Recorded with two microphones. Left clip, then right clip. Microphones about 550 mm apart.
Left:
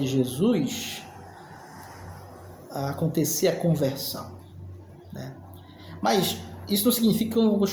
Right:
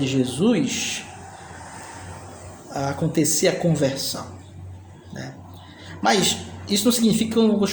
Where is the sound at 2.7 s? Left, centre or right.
Left.